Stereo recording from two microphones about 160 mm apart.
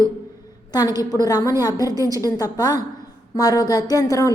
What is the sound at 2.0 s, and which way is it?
Speech, 20° right (ahead or behind).